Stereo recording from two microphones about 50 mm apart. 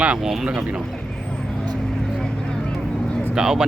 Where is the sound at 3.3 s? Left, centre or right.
Centre.